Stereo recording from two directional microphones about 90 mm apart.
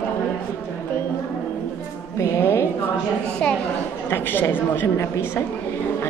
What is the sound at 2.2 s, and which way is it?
Speech, 30° left (ahead or behind).